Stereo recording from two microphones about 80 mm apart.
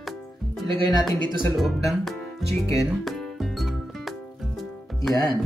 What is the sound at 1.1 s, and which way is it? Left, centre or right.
Speech, right.